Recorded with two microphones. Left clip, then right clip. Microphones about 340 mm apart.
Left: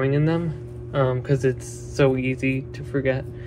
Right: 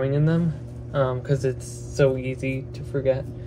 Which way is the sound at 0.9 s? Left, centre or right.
Left.